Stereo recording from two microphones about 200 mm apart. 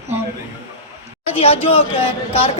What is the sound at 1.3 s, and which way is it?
Speech, 30° left (ahead or behind).